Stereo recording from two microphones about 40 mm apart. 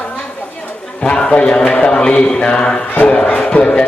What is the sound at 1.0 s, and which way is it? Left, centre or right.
Speech, left.